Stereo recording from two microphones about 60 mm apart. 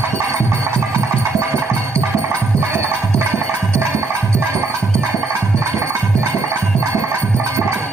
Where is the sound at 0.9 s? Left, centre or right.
Right.